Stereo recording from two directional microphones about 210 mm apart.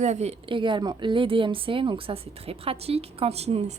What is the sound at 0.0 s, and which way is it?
A woman's voice, 30° right (ahead or behind).